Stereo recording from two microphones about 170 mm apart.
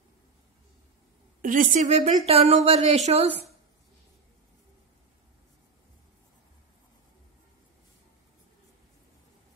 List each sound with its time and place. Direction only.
1.4 s a woman's voice: 50° right (ahead or behind)